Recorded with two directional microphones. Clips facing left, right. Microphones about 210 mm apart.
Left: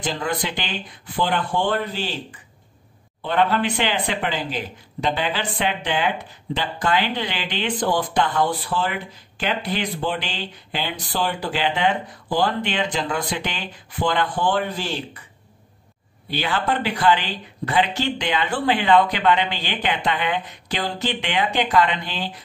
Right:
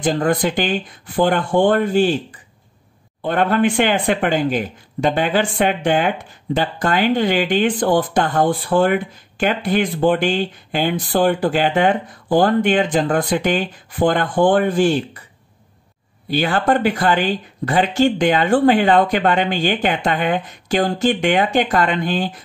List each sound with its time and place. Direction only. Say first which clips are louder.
0.0 s speech: right 8 dB; 50° right (ahead or behind)
3.2 s speech: right 4 dB; 50° right (ahead or behind)
16.3 s speech: right 6 dB; 45° right (ahead or behind)